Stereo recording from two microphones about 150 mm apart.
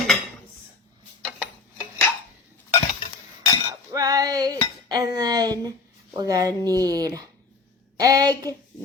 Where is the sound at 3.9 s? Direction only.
25° right (ahead or behind).